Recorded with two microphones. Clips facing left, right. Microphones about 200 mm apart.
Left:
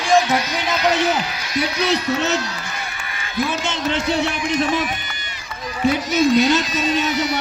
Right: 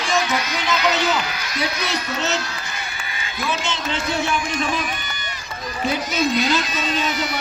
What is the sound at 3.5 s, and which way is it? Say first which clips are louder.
Speech: left 2 dB; 55° left (ahead or behind).